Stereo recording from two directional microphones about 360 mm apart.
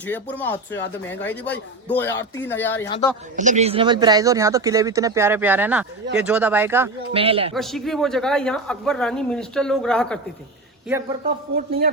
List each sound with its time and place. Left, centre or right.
0.0 s speech: centre
3.3 s speech: centre
7.5 s speech: centre
11.5 s a man's voice: right